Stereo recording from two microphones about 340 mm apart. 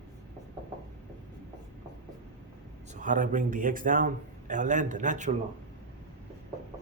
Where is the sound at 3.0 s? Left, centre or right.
Right.